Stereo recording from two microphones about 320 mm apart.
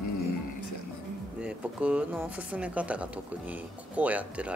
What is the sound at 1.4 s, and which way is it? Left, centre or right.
Speech, centre.